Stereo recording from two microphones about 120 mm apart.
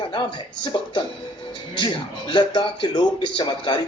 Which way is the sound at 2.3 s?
40° left (ahead or behind).